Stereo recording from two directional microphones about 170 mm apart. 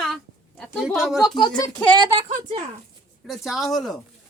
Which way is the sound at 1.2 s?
25° left (ahead or behind).